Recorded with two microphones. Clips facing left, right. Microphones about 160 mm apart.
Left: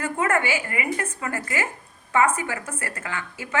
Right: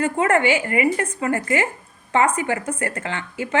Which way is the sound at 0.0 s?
30° right (ahead or behind).